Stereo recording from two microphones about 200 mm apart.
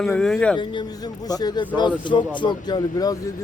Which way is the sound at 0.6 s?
25° left (ahead or behind).